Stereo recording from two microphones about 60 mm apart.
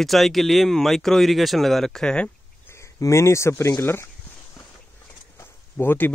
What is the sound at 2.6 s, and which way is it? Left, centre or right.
Speech, left.